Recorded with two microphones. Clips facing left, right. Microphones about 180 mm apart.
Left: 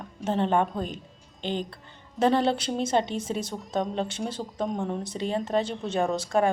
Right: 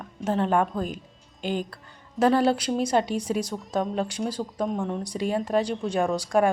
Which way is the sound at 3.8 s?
5° right (ahead or behind).